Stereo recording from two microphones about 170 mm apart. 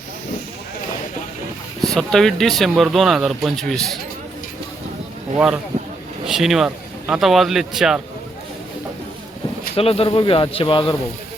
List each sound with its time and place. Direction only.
1.8 s speech: 5° left (ahead or behind)
6.2 s speech: centre (ahead or behind)
9.7 s speech: 35° left (ahead or behind)